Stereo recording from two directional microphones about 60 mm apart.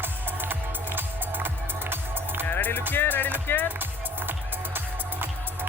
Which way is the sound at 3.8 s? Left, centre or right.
Right.